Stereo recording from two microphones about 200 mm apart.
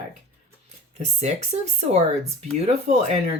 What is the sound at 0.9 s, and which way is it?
Speech, 35° right (ahead or behind).